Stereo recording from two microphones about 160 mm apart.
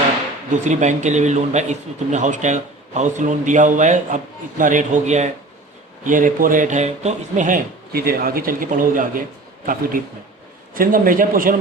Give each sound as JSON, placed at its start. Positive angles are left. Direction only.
{"t": 0.5, "sound": "speech", "side_deg": -50}
{"t": 6.1, "sound": "speech", "side_deg": -55}
{"t": 10.8, "sound": "speech", "side_deg": -60}